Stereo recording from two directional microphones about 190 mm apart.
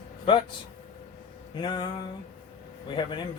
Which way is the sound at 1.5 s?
25° left (ahead or behind).